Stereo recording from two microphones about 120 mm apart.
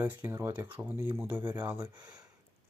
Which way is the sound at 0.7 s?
15° right (ahead or behind).